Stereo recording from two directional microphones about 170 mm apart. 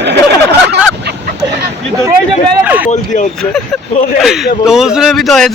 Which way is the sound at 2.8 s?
45° left (ahead or behind).